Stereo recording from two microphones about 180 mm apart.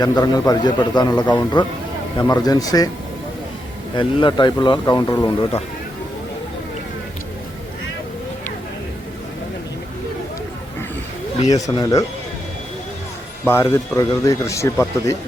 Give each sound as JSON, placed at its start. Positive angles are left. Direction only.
{"t": 0.0, "sound": "a man's voice", "side_deg": 20}
{"t": 1.2, "sound": "speech", "side_deg": 10}
{"t": 2.1, "sound": "a man's voice", "side_deg": 20}
{"t": 3.9, "sound": "a man's voice", "side_deg": 25}
{"t": 11.4, "sound": "a man's voice", "side_deg": 20}
{"t": 13.4, "sound": "speech", "side_deg": 15}